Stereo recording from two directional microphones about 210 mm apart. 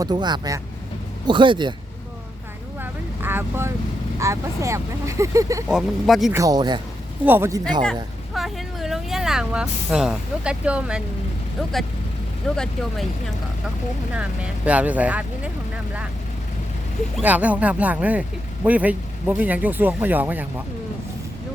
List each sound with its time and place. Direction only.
0.0 s speech: 20° right (ahead or behind)
2.8 s vehicle: 10° right (ahead or behind)
4.2 s speech: 15° right (ahead or behind)
5.6 s speech: centre (ahead or behind)
6.3 s speech: 15° right (ahead or behind)
8.3 s speech: centre (ahead or behind)
12.4 s speech: 5° left (ahead or behind)
14.2 s speech: 5° right (ahead or behind)
17.2 s speech: 5° right (ahead or behind)